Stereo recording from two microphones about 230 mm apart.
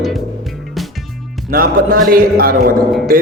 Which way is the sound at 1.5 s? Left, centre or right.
Right.